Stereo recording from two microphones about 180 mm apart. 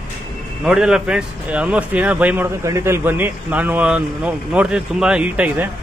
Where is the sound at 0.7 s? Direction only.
5° right (ahead or behind).